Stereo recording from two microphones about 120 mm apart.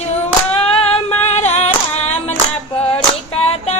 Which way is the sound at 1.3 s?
65° left (ahead or behind).